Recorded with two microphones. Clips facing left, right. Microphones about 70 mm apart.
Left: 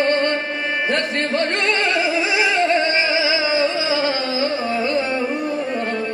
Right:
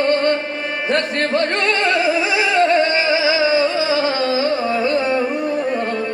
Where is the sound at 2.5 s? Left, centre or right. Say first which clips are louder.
Right 5 dB; right.